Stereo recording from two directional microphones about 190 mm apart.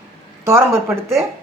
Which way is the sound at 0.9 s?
15° right (ahead or behind).